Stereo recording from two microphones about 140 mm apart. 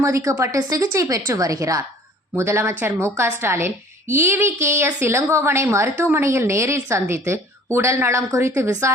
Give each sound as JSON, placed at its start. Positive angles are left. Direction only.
{"t": 0.0, "sound": "a woman's voice", "side_deg": -20}